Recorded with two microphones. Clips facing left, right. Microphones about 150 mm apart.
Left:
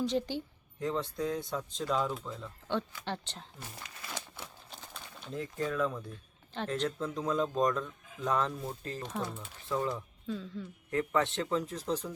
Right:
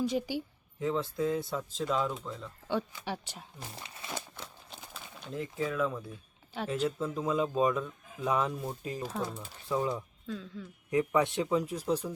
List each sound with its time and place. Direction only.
0.0 s speech: 10° right (ahead or behind)
2.6 s speech: 10° right (ahead or behind)
4.0 s a sound: 25° right (ahead or behind)
4.7 s speech: centre (ahead or behind)
10.2 s speech: centre (ahead or behind)
10.9 s speech: 10° right (ahead or behind)